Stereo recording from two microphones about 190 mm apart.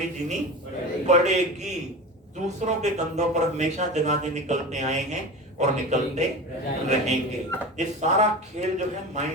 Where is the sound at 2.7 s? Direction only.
40° right (ahead or behind).